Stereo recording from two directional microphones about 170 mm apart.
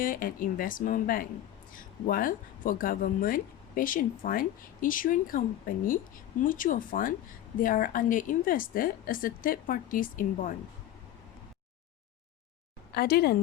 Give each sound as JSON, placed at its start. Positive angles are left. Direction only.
{"t": 0.0, "sound": "speech", "side_deg": 55}
{"t": 12.9, "sound": "speech", "side_deg": 65}